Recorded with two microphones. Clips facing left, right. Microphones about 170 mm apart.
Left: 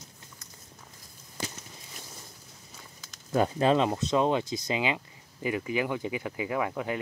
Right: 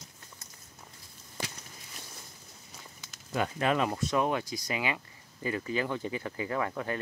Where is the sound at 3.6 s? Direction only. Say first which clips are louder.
Left 2 dB; 25° left (ahead or behind).